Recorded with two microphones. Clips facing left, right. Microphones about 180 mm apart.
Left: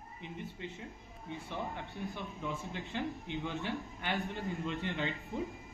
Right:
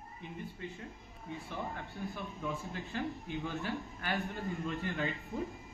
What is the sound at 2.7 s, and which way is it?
A man's voice, 20° left (ahead or behind).